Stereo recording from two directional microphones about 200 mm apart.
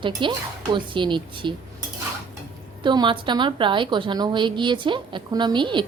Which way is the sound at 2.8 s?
20° right (ahead or behind).